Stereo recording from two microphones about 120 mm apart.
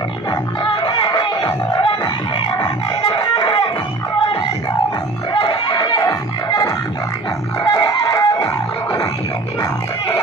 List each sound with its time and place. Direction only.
0.8 s a sound: 35° left (ahead or behind)
3.0 s chicken: 40° left (ahead or behind)
5.3 s music: 40° left (ahead or behind)